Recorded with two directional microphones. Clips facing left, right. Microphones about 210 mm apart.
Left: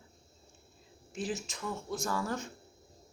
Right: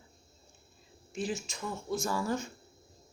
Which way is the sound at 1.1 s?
Centre (ahead or behind).